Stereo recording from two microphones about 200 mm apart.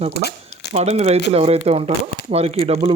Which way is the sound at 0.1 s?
55° left (ahead or behind).